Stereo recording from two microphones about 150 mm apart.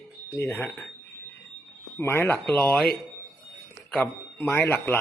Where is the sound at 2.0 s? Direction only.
15° left (ahead or behind).